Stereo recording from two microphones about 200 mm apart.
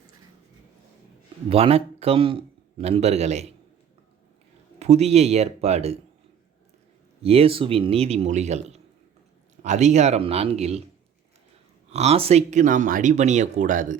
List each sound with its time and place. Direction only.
1.5 s a man's voice: 30° right (ahead or behind)
4.8 s speech: 30° right (ahead or behind)
7.2 s speech: 30° right (ahead or behind)
11.9 s speech: 30° right (ahead or behind)